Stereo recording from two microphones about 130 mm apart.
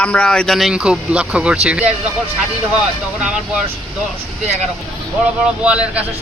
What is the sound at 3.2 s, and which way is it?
Speech, 10° right (ahead or behind).